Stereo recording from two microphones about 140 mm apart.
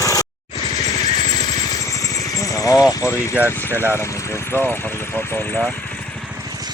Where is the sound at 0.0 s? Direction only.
25° left (ahead or behind).